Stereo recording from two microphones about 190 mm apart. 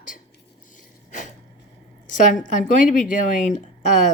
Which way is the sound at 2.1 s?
40° left (ahead or behind).